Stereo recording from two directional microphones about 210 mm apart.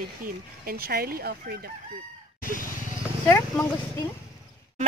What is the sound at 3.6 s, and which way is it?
Speech, 15° left (ahead or behind).